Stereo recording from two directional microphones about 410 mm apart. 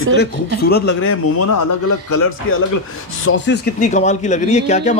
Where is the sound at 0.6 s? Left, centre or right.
Left.